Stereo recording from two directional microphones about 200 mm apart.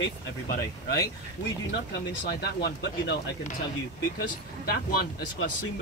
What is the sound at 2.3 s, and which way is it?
Speech, 55° left (ahead or behind).